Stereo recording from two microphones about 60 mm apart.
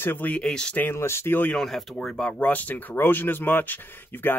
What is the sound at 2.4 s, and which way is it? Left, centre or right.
Speech, left.